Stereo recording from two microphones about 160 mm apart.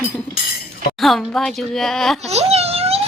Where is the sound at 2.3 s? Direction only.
40° right (ahead or behind).